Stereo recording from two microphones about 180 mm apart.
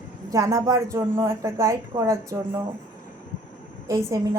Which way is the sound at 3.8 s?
15° right (ahead or behind).